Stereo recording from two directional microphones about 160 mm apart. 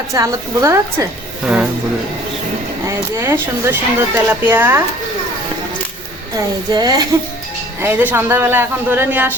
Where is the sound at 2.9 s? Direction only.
15° right (ahead or behind).